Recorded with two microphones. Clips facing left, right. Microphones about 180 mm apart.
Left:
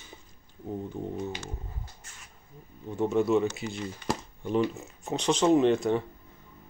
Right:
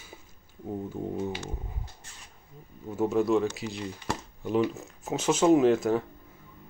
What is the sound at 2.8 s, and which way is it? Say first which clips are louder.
Speech: even; 5° right (ahead or behind).